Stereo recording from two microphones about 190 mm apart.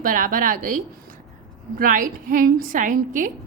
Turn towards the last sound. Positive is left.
turn(degrees=-45)  # may be behind; listen again after turning